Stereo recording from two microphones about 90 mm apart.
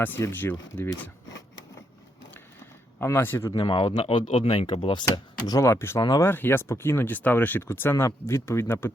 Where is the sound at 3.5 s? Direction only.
65° left (ahead or behind).